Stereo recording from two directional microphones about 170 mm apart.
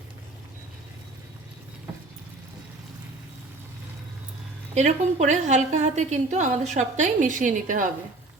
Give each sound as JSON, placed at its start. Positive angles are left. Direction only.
{"t": 4.7, "sound": "a woman's voice", "side_deg": -45}